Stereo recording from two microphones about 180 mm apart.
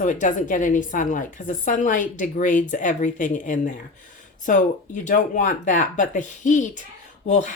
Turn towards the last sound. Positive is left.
turn(degrees=45)  # may be behind; listen again after turning